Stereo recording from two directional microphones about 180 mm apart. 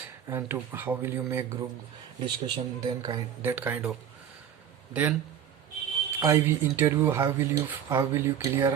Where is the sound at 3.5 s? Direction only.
10° right (ahead or behind).